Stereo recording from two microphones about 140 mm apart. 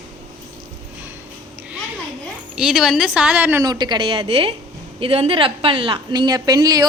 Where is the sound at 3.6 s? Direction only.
30° right (ahead or behind).